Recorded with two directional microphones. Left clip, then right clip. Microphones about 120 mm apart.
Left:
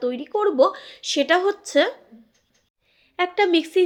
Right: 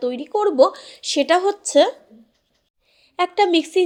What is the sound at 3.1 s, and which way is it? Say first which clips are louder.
Speech: right 2 dB; 35° right (ahead or behind).